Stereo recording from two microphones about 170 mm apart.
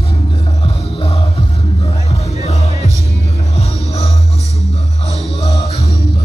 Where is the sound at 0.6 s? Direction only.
35° left (ahead or behind).